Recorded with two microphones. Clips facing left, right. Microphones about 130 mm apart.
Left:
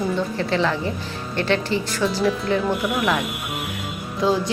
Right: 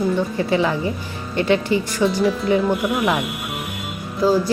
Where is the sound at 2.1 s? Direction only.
5° left (ahead or behind).